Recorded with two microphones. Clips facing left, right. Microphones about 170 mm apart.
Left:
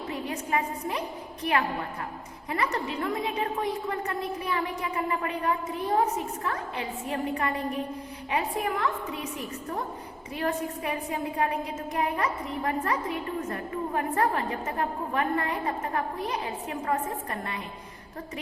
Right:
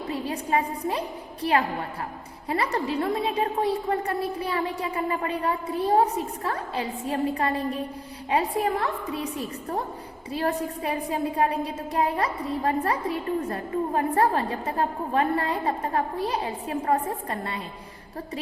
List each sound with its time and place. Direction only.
0.3 s a woman's voice: 30° right (ahead or behind)